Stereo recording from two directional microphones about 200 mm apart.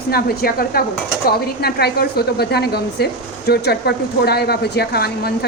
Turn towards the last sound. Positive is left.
turn(degrees=50)  # may be behind; listen again after turning